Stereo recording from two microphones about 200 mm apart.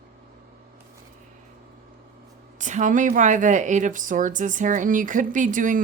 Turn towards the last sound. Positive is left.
turn(degrees=-40)  # may be behind; listen again after turning